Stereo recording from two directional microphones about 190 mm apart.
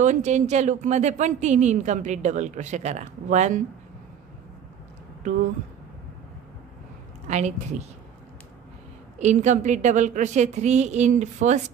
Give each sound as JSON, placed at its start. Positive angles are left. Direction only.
{"t": 0.0, "sound": "speech", "side_deg": -40}
{"t": 7.2, "sound": "speech", "side_deg": -40}
{"t": 9.2, "sound": "speech", "side_deg": -40}